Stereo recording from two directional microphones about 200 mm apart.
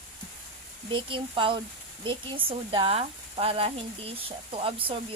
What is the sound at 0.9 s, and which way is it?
Speech, 25° right (ahead or behind).